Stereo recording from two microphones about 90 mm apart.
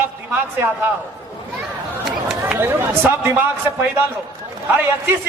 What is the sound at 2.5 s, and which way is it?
A man's voice, 25° right (ahead or behind).